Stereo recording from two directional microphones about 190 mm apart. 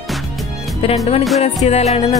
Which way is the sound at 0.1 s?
Centre (ahead or behind).